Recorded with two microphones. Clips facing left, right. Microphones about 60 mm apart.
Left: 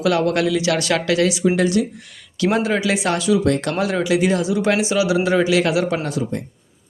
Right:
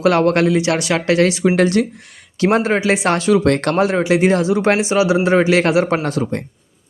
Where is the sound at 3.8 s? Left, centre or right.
Right.